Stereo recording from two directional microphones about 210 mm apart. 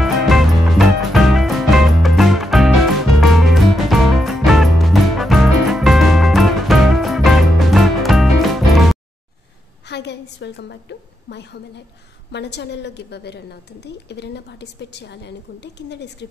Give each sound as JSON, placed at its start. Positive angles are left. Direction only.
{"t": 0.0, "sound": "music", "side_deg": 0}
{"t": 9.8, "sound": "a woman's voice", "side_deg": 55}